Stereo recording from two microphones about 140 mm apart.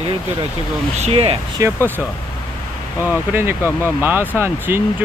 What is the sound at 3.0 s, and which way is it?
Speech, 15° right (ahead or behind).